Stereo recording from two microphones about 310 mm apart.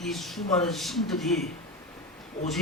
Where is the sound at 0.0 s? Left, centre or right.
Centre.